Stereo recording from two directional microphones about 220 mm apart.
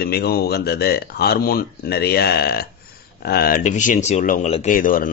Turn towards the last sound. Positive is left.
turn(degrees=40)  # may be behind; listen again after turning